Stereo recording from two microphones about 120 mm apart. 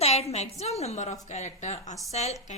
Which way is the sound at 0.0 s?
60° left (ahead or behind).